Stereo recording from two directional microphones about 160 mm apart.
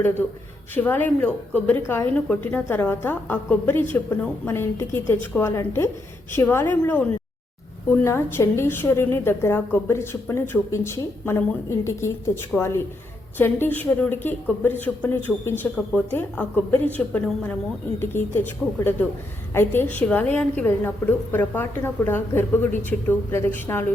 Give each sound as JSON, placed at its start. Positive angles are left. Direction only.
{"t": 0.0, "sound": "a woman's voice", "side_deg": 15}